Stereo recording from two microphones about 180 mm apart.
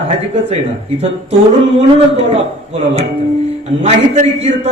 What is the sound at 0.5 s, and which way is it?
Speech, 35° right (ahead or behind).